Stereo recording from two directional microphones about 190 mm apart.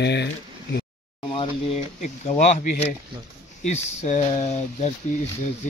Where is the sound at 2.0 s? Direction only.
40° left (ahead or behind).